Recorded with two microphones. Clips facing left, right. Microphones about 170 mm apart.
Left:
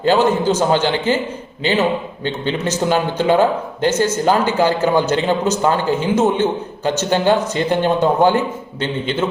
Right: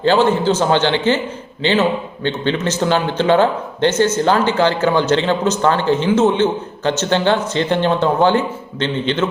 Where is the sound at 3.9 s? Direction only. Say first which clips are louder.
Right 1 dB; 35° left (ahead or behind).